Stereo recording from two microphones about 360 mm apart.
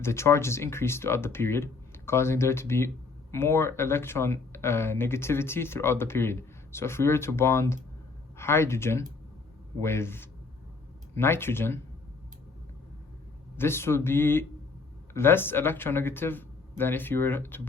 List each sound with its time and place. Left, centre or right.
0.0 s speech: centre
13.6 s speech: centre